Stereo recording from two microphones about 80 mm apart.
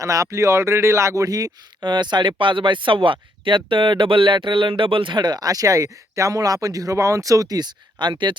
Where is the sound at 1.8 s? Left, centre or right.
Right.